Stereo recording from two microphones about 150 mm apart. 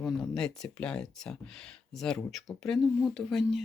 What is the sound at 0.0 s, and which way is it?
Speech, 5° left (ahead or behind).